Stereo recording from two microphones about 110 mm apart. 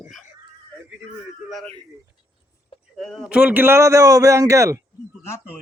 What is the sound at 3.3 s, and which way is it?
A man's voice, 10° right (ahead or behind).